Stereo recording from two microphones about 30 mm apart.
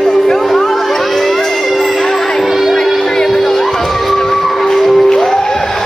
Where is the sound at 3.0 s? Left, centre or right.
Centre.